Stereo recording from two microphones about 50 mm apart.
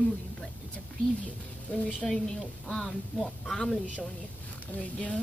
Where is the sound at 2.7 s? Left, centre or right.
Left.